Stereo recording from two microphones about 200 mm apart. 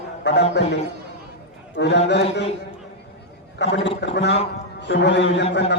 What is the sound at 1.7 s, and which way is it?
Speech, 60° left (ahead or behind).